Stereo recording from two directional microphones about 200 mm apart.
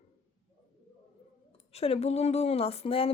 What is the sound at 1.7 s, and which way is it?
Speech, 30° left (ahead or behind).